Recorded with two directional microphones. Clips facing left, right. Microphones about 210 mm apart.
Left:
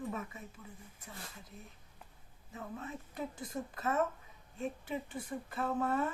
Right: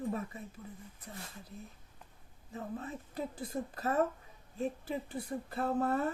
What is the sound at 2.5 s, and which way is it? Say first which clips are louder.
Speech: right 3 dB; 35° right (ahead or behind).